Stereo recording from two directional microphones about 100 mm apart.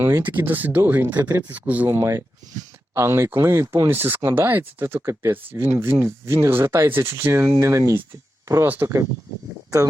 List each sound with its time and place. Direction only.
0.0 s speech: 20° right (ahead or behind)